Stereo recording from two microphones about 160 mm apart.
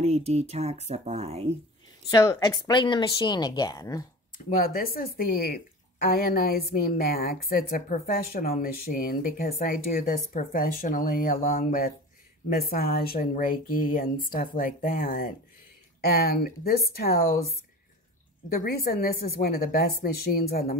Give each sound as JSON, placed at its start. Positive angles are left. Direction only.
{"t": 0.0, "sound": "speech", "side_deg": -40}
{"t": 2.0, "sound": "speech", "side_deg": 20}
{"t": 4.5, "sound": "a woman's voice", "side_deg": 65}
{"t": 12.4, "sound": "a woman's voice", "side_deg": 70}